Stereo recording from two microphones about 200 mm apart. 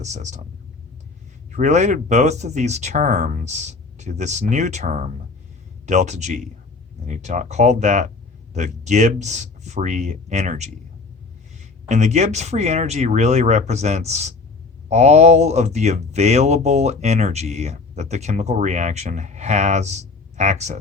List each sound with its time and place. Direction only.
0.0 s speech: 35° right (ahead or behind)
1.5 s speech: 35° right (ahead or behind)
11.9 s speech: 35° right (ahead or behind)